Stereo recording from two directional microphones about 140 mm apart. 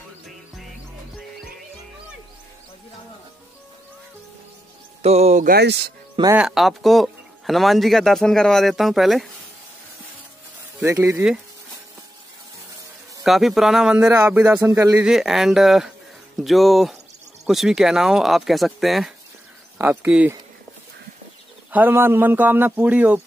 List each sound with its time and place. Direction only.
5.0 s speech: 50° right (ahead or behind); by 5.9 s 80° right
6.3 s speech: 5° right (ahead or behind)
10.8 s speech: 20° right (ahead or behind)
13.2 s speech: centre (ahead or behind); by 15.0 s 20° right (ahead or behind)
15.0 s speech: 5° right (ahead or behind)
19.8 s speech: 15° right (ahead or behind)
21.7 s speech: 15° right (ahead or behind)